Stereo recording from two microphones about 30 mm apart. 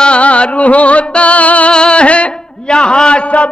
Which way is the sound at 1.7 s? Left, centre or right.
Left.